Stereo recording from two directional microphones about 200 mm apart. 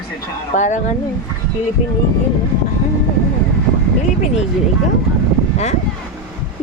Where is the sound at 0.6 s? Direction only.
40° left (ahead or behind).